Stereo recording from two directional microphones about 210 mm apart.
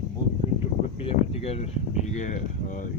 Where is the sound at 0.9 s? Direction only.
30° left (ahead or behind).